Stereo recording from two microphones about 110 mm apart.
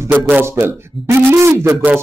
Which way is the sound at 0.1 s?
15° right (ahead or behind).